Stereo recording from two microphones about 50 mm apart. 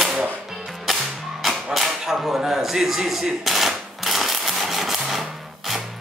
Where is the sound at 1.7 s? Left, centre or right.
Centre.